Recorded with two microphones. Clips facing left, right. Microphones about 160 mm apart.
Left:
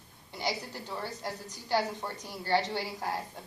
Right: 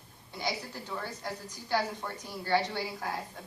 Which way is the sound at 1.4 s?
20° left (ahead or behind).